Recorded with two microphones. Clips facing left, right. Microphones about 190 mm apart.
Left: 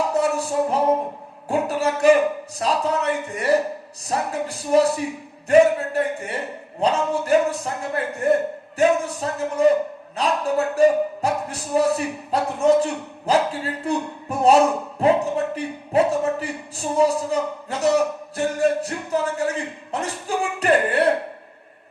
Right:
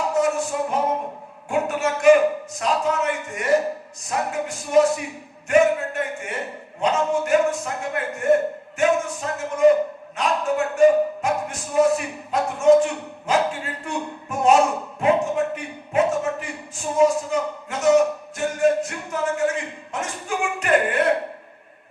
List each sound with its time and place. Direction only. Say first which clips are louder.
0.1 s music: even; 35° left (ahead or behind)
1.5 s speech: left 1 dB; 35° left (ahead or behind)